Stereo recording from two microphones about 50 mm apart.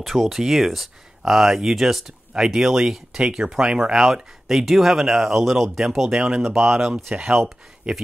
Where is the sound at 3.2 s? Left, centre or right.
Centre.